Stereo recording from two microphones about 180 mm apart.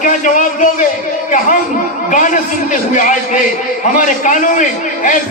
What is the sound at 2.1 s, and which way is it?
A man's voice, 45° left (ahead or behind).